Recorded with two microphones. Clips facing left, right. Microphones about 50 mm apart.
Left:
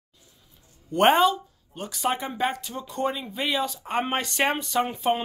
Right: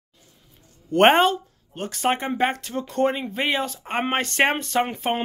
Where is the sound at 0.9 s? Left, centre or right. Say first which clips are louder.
Right 3 dB; right.